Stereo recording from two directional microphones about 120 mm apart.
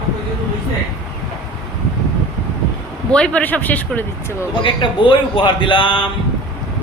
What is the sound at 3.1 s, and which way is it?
Speech, 10° left (ahead or behind).